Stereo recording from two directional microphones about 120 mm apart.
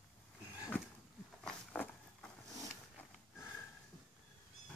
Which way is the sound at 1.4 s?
10° left (ahead or behind).